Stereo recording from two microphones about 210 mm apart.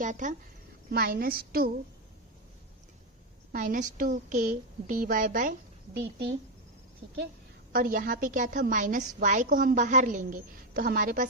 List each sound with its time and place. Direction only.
0.0 s a woman's voice: 35° right (ahead or behind)
3.5 s a woman's voice: 40° right (ahead or behind)
7.7 s a woman's voice: 40° right (ahead or behind)